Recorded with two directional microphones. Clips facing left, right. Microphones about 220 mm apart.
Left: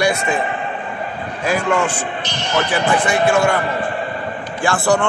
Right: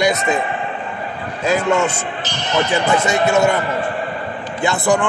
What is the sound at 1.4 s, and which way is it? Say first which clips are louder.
Speech: right 2 dB; 25° right (ahead or behind).